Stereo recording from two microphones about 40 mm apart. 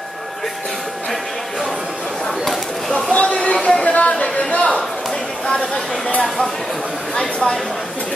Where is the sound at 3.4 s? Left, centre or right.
Left.